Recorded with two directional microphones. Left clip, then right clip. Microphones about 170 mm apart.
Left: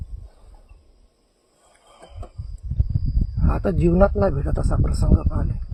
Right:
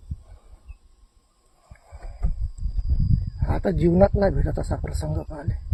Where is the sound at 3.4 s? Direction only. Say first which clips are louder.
Left 1 dB; 10° left (ahead or behind).